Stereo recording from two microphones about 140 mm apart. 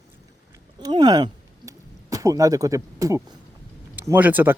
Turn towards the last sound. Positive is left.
turn(degrees=-10)  # may be behind; listen again after turning